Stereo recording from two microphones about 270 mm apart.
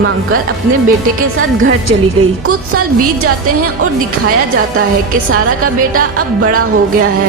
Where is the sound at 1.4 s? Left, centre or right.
Right.